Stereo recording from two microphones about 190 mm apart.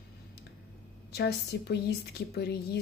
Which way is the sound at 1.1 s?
60° left (ahead or behind).